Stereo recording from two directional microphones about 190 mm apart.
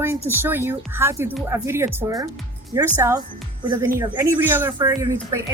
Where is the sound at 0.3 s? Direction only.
10° right (ahead or behind).